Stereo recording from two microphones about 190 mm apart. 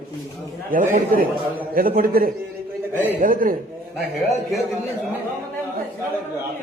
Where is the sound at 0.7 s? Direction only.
45° right (ahead or behind).